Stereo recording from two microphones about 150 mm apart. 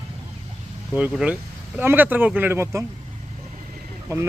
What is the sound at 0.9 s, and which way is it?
Speech, 10° right (ahead or behind).